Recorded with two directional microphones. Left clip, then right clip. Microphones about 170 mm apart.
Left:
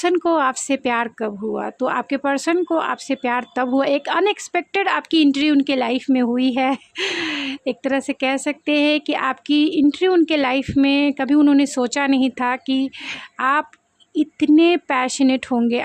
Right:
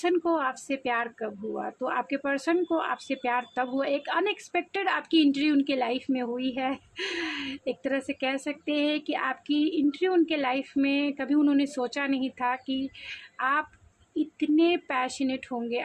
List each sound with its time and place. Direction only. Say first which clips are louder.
0.0 s speech: left 8 dB; 55° left (ahead or behind)